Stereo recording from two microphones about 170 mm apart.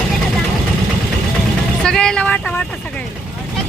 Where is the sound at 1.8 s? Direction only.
5° left (ahead or behind).